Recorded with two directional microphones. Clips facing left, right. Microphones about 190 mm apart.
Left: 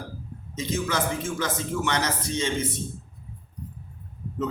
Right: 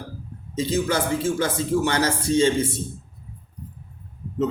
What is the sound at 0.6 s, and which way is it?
Speech, 35° right (ahead or behind).